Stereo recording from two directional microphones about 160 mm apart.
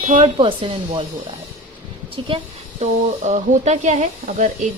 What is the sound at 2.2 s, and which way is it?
Speech, 35° right (ahead or behind).